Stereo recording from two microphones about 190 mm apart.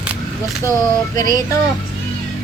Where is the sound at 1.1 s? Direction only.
20° left (ahead or behind).